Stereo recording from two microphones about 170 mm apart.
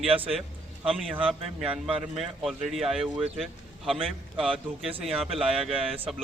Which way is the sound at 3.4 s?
Centre (ahead or behind).